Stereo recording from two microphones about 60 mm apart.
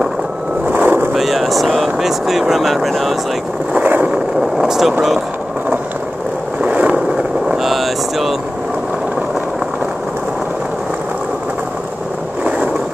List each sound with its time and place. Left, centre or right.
0.7 s boat: right
1.1 s speech: centre
3.7 s vehicle: right
4.6 s speech: centre
6.6 s vehicle: right
7.4 s vehicle: centre